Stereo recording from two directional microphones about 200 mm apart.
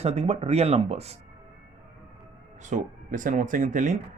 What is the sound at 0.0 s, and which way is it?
Speech, 30° right (ahead or behind).